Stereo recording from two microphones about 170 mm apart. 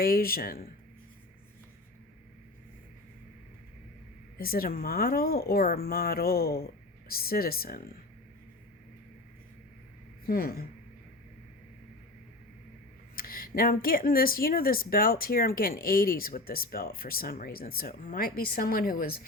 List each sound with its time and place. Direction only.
0.0 s speech: 60° left (ahead or behind)
4.4 s speech: 60° left (ahead or behind)
10.2 s speech: 60° left (ahead or behind)
13.1 s speech: 60° left (ahead or behind)